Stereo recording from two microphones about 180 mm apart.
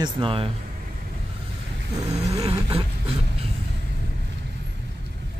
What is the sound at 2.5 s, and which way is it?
Speech, 30° right (ahead or behind).